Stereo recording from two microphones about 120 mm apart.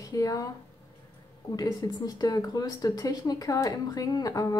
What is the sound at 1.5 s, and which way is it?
Speech, 30° left (ahead or behind).